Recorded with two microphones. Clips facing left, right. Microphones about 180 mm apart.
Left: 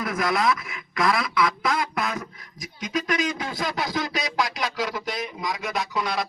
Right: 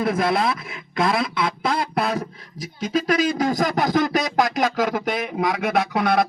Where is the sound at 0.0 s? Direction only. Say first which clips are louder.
Right 4 dB; 30° right (ahead or behind).